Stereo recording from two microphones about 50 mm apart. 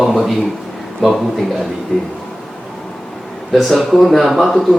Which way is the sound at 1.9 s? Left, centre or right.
Centre.